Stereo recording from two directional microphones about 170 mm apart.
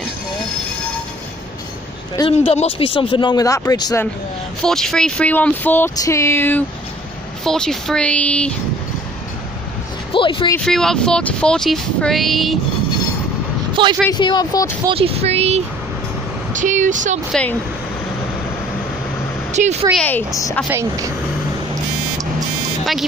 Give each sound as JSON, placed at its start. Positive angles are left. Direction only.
{"t": 2.1, "sound": "speech", "side_deg": 30}
{"t": 4.6, "sound": "speech", "side_deg": 5}
{"t": 10.1, "sound": "speech", "side_deg": 30}
{"t": 10.6, "sound": "speech", "side_deg": 5}
{"t": 13.8, "sound": "speech", "side_deg": -30}
{"t": 14.1, "sound": "speech", "side_deg": 25}
{"t": 14.9, "sound": "speech", "side_deg": -35}
{"t": 17.3, "sound": "speech", "side_deg": 5}
{"t": 19.5, "sound": "speech", "side_deg": -40}
{"t": 20.0, "sound": "speech", "side_deg": 10}
{"t": 20.6, "sound": "speech", "side_deg": -15}